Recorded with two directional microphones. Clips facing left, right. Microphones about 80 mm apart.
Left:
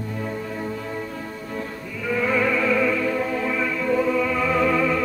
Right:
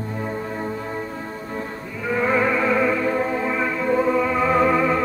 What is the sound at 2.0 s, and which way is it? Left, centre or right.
Music, right.